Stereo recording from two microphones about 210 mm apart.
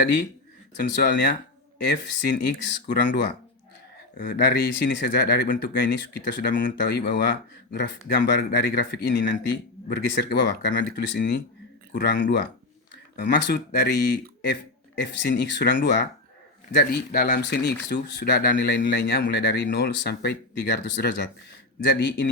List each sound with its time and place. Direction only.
0.0 s speech: 55° left (ahead or behind)
2.2 s speech: 50° left (ahead or behind)
13.5 s speech: 50° left (ahead or behind)